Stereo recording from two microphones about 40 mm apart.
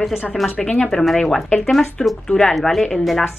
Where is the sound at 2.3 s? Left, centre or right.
Left.